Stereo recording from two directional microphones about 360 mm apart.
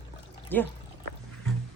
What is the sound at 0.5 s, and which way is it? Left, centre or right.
Speech, centre.